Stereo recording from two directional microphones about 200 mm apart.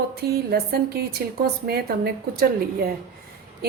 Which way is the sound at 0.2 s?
50° right (ahead or behind).